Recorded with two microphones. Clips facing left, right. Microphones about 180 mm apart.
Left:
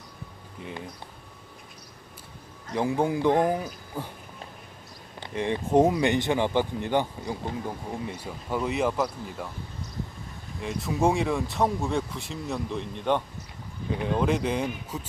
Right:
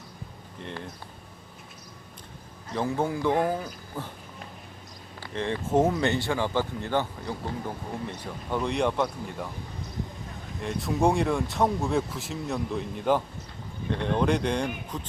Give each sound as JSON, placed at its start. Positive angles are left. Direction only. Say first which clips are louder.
{"t": 0.6, "sound": "speech", "louder": "even", "side_deg": 5}
{"t": 2.7, "sound": "speech", "louder": "left 2 dB", "side_deg": 15}
{"t": 5.2, "sound": "speech", "louder": "left 2 dB", "side_deg": 15}
{"t": 10.6, "sound": "speech", "louder": "even", "side_deg": 0}